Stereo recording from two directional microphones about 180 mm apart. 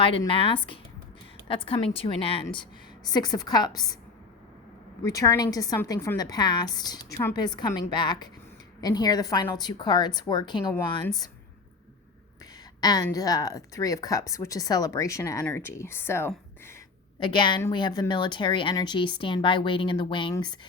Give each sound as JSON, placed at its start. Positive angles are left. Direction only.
{"t": 0.3, "sound": "speech", "side_deg": 30}
{"t": 5.0, "sound": "speech", "side_deg": 20}
{"t": 12.8, "sound": "speech", "side_deg": 20}
{"t": 17.2, "sound": "speech", "side_deg": 25}